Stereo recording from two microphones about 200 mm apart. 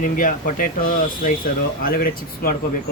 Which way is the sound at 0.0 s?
45° left (ahead or behind).